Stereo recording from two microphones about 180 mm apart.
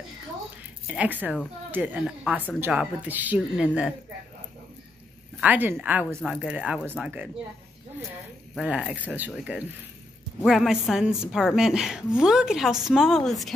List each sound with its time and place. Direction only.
0.6 s speech: 5° right (ahead or behind)
5.4 s speech: 10° right (ahead or behind)
8.5 s a woman's voice: 5° right (ahead or behind)